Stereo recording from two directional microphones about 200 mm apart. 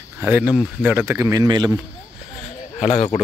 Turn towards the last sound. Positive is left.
turn(degrees=35)  # may be behind; listen again after turning